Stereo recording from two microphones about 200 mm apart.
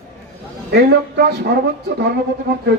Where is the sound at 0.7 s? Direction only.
55° right (ahead or behind).